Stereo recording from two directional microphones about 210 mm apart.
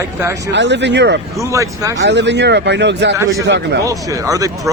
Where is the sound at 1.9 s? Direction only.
55° right (ahead or behind).